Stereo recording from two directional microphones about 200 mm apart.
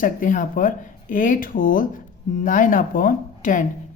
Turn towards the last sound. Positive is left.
turn(degrees=40)  # may be behind; listen again after turning